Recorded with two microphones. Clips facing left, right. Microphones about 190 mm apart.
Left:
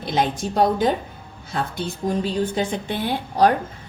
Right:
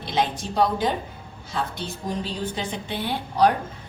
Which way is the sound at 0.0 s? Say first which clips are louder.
Left 3 dB; 50° left (ahead or behind).